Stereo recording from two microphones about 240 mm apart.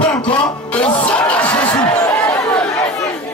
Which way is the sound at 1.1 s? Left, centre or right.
Centre.